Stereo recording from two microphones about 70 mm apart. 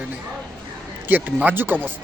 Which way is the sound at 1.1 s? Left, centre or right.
Right.